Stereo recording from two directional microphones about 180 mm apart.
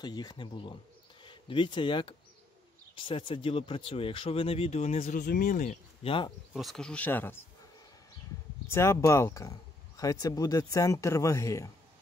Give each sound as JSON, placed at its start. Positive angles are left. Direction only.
{"t": 0.0, "sound": "speech", "side_deg": 20}
{"t": 6.0, "sound": "speech", "side_deg": 30}
{"t": 6.5, "sound": "speech", "side_deg": 0}
{"t": 8.6, "sound": "speech", "side_deg": 15}